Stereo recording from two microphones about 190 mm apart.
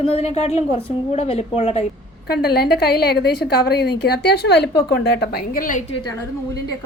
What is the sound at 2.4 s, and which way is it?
A woman's voice, 55° left (ahead or behind).